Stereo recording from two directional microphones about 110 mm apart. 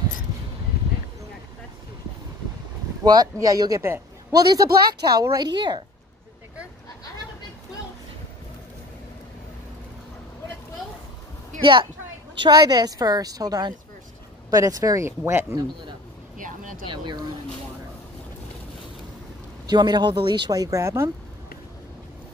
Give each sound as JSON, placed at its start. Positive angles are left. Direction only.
{"t": 3.0, "sound": "speech", "side_deg": -35}
{"t": 11.6, "sound": "a woman's voice", "side_deg": -50}
{"t": 16.9, "sound": "a woman's voice", "side_deg": -45}
{"t": 19.6, "sound": "speech", "side_deg": -40}